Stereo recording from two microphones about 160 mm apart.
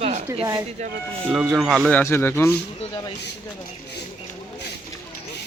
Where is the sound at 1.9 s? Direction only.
15° left (ahead or behind).